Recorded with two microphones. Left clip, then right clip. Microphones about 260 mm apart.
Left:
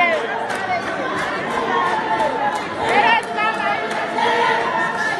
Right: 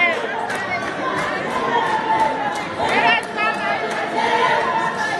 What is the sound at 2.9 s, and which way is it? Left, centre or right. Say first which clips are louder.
Chatter: left 2 dB; left.